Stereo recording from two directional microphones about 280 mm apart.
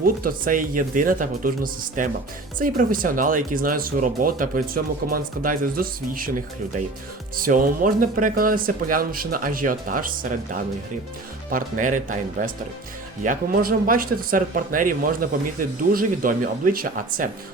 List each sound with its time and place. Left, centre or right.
0.0 s speech: right
7.3 s speech: right